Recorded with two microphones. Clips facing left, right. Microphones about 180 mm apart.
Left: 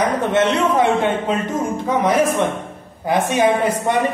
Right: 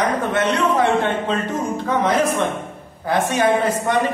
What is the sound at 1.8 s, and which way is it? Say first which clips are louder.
A man's voice: left 2 dB; 15° left (ahead or behind).